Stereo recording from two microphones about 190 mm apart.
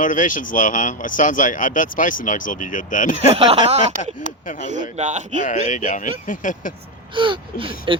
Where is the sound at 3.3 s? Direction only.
30° right (ahead or behind).